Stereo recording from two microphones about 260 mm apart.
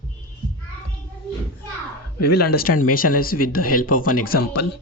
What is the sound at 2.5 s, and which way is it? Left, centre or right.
Speech, left.